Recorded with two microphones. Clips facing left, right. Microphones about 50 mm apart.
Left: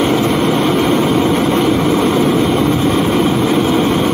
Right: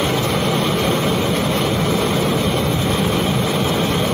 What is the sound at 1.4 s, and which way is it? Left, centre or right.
Vehicle, left.